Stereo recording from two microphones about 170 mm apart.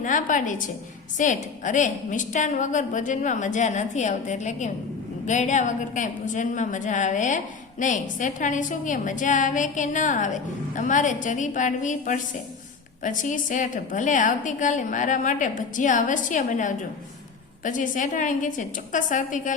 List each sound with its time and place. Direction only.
0.0 s a woman's voice: 50° left (ahead or behind)